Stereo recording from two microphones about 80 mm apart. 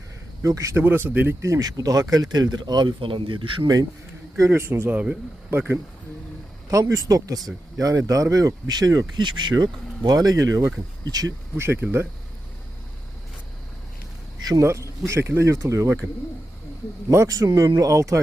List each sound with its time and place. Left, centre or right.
0.4 s speech: right
0.8 s speech: right
1.5 s speech: right
4.4 s speech: right
6.7 s speech: right
9.0 s speech: right
11.5 s speech: right
14.6 s speech: right
17.1 s speech: right